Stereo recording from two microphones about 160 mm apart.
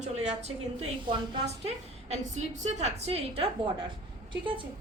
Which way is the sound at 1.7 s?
45° right (ahead or behind).